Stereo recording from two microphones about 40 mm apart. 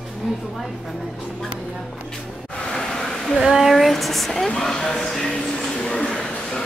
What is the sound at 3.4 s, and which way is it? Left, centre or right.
Speech, centre.